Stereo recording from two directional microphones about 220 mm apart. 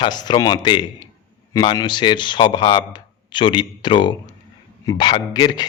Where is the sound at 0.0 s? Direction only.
20° left (ahead or behind).